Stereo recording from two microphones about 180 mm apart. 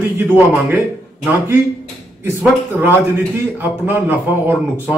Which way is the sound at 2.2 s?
15° right (ahead or behind).